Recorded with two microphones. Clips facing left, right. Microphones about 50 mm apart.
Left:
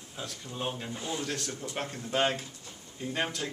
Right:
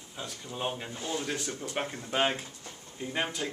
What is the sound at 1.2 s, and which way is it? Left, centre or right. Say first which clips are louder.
Speech: right 1 dB; centre.